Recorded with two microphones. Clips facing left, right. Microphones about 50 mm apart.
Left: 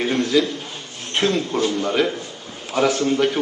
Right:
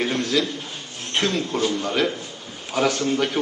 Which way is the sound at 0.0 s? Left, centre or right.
Centre.